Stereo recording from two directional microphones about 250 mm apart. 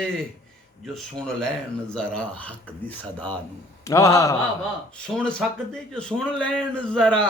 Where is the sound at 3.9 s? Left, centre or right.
Centre.